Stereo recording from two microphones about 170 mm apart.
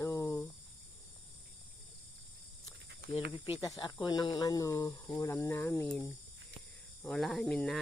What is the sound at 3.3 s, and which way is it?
Speech, 30° left (ahead or behind).